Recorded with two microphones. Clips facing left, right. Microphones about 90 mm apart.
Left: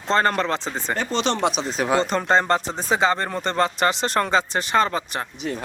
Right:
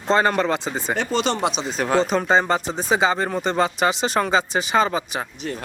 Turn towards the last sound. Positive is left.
turn(degrees=20)  # may be behind; listen again after turning